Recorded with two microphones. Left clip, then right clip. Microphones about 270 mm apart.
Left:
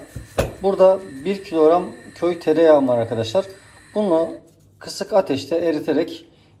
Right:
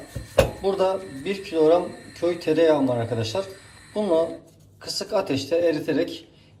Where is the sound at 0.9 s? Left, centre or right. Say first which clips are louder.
Left 4 dB; centre.